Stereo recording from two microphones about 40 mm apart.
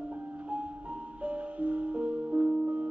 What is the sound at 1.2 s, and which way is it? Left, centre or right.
Music, right.